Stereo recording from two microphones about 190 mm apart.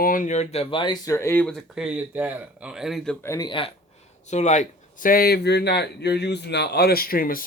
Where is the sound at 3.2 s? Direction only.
20° left (ahead or behind).